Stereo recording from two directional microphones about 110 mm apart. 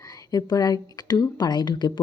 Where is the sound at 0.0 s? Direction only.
35° left (ahead or behind).